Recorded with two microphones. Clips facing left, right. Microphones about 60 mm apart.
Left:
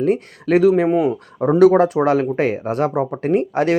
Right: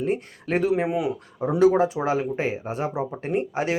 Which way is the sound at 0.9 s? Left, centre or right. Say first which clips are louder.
Left 8 dB; left.